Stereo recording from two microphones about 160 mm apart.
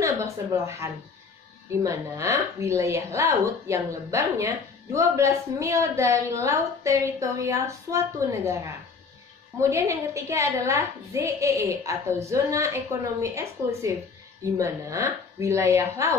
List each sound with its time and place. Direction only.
0.0 s a woman's voice: 20° right (ahead or behind)
9.6 s a woman's voice: 20° right (ahead or behind)